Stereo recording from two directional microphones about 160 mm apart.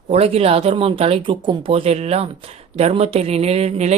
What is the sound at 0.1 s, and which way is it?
Speech, 40° right (ahead or behind).